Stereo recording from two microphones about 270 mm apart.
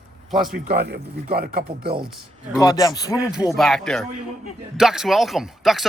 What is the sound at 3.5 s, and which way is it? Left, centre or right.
Speech, centre.